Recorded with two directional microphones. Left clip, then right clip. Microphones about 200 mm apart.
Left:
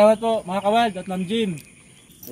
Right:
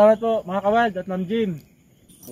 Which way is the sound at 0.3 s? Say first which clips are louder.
Even; 10° left (ahead or behind).